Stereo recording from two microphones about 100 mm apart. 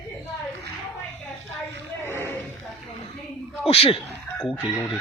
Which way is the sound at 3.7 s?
75° left (ahead or behind).